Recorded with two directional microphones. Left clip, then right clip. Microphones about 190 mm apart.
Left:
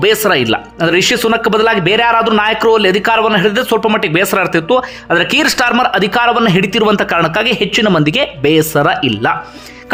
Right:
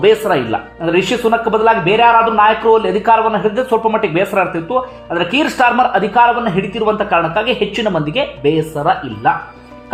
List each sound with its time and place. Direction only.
0.0 s speech: 20° left (ahead or behind)